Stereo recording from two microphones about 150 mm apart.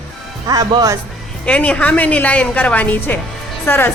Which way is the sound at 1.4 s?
10° left (ahead or behind).